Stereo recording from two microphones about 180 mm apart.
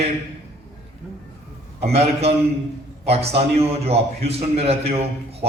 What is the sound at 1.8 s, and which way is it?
A man's voice, 35° right (ahead or behind).